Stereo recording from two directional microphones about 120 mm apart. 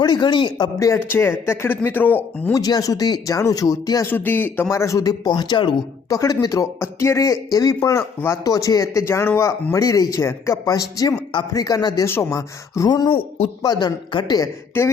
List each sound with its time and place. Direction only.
0.0 s speech: 40° left (ahead or behind)
0.8 s speech: 25° left (ahead or behind)
2.5 s speech: 30° left (ahead or behind)
4.0 s speech: 15° left (ahead or behind); by 14.5 s 35° left (ahead or behind)